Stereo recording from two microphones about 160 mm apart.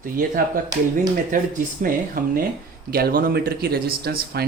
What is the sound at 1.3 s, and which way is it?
Speech, 55° right (ahead or behind).